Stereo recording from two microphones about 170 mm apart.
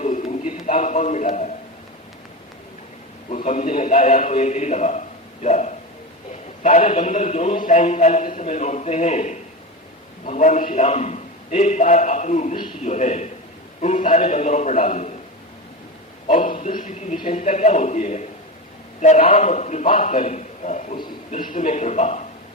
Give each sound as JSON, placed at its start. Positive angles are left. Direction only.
{"t": 0.0, "sound": "a sound", "side_deg": 45}
{"t": 0.6, "sound": "a man's voice", "side_deg": 45}
{"t": 3.2, "sound": "a man's voice", "side_deg": 40}
{"t": 16.2, "sound": "a man's voice", "side_deg": 50}